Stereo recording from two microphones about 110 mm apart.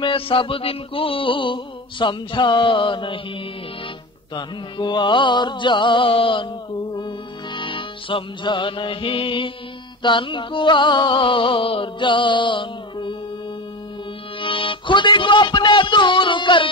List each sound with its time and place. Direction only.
0.0 s music: 55° left (ahead or behind)
4.4 s music: 40° left (ahead or behind)
14.4 s speech: 50° left (ahead or behind)